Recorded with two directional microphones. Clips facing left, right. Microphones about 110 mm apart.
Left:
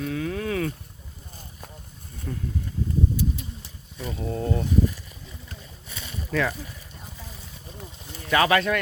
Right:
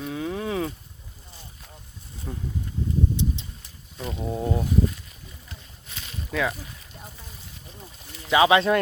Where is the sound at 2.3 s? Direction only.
15° right (ahead or behind).